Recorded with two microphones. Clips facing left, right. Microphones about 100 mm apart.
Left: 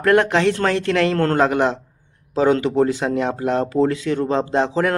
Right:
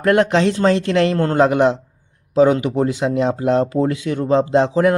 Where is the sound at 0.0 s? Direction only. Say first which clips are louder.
Right 1 dB; 25° right (ahead or behind).